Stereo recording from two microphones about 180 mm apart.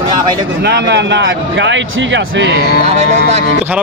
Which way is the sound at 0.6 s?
70° right (ahead or behind).